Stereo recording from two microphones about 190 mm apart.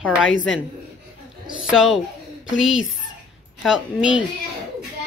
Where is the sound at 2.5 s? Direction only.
90° left.